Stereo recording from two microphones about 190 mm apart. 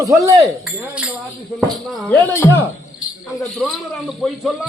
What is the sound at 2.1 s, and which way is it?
Speech, 10° left (ahead or behind).